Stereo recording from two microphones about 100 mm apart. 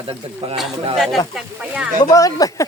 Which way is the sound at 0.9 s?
Centre (ahead or behind).